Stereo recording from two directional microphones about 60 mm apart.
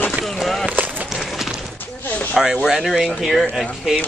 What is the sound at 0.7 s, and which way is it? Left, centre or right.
Run, right.